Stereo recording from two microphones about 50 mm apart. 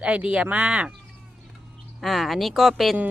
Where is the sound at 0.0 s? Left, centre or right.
Right.